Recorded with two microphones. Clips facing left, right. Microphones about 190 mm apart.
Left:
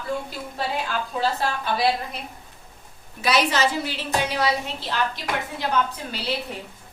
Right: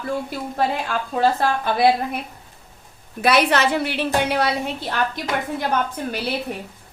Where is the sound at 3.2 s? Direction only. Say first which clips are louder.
Right 4 dB; 60° right (ahead or behind).